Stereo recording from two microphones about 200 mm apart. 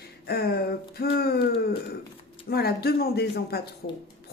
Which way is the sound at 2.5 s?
50° left (ahead or behind).